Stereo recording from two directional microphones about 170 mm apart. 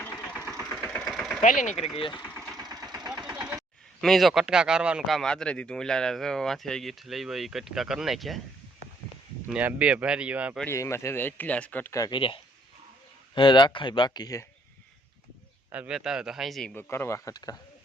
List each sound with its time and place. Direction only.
0.0 s vehicle: 10° left (ahead or behind)
0.6 s engine: 5° left (ahead or behind)
1.4 s speech: 50° left (ahead or behind)
2.0 s speech: 30° left (ahead or behind)
2.6 s engine: 20° right (ahead or behind)
4.0 s speech: centre (ahead or behind)
9.5 s speech: 10° right (ahead or behind)
10.7 s speech: 15° left (ahead or behind)
15.7 s speech: 5° right (ahead or behind)
16.9 s speech: 15° left (ahead or behind)